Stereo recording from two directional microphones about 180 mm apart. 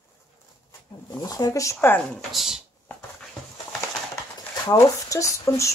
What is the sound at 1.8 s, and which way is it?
Speech, 5° left (ahead or behind).